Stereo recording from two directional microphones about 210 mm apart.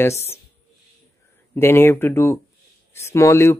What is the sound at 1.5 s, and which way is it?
Speech, 10° left (ahead or behind).